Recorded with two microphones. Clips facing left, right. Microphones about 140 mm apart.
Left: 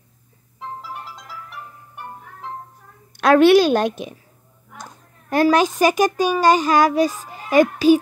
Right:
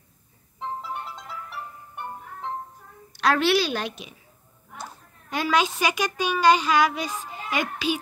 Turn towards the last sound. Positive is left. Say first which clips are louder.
# left 13 dB
turn(degrees=40)  # may be behind; listen again after turning